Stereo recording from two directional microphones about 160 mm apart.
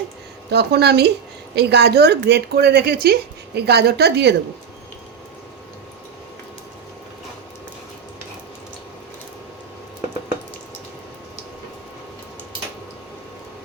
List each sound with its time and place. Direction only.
0.5 s speech: 90° right